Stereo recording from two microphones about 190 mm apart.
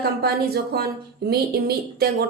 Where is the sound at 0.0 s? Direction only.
55° right (ahead or behind).